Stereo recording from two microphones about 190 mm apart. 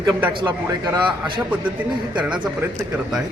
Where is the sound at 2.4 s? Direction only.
10° right (ahead or behind).